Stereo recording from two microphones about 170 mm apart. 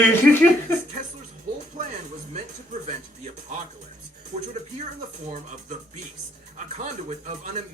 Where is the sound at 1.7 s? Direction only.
50° right (ahead or behind).